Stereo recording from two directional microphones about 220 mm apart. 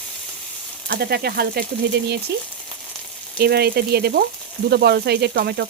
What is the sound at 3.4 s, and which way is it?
Speech, 45° right (ahead or behind).